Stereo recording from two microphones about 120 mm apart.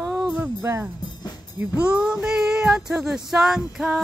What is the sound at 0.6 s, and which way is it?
Speech, 20° right (ahead or behind).